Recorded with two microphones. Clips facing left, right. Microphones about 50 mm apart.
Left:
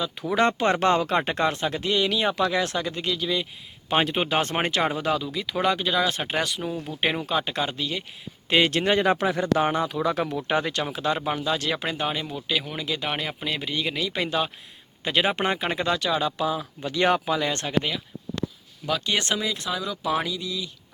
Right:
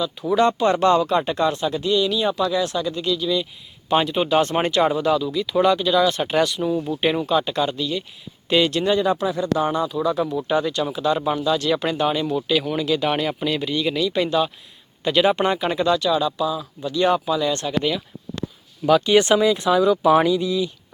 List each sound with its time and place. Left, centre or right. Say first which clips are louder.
0.3 s speech: right 4 dB; left
6.7 s speech: right 9 dB; centre
7.3 s speech: right 5 dB; left
9.6 s speech: right 3 dB; left
10.8 s speech: right 5 dB; left
11.8 s speech: right 6 dB; centre; by 17.8 s left
18.9 s speech: right 10 dB; centre; by 20.7 s right